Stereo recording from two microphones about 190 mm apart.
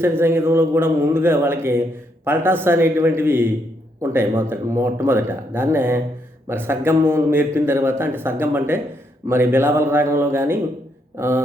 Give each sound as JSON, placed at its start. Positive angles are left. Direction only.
{"t": 0.0, "sound": "a man's voice", "side_deg": -10}